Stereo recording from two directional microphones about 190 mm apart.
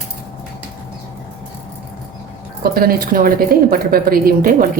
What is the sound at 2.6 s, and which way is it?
A woman's voice, 50° right (ahead or behind).